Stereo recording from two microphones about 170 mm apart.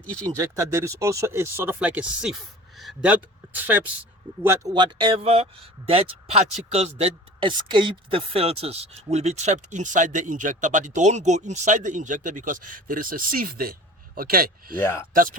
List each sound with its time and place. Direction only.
0.0 s speech: 5° left (ahead or behind)
0.3 s speech: 20° right (ahead or behind)
4.4 s speech: 25° right (ahead or behind); by 14.8 s 60° right (ahead or behind)
14.8 s speech: 15° left (ahead or behind)
15.1 s speech: 55° right (ahead or behind)